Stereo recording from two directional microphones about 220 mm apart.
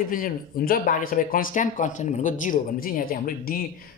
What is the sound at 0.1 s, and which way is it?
Speech, 40° left (ahead or behind).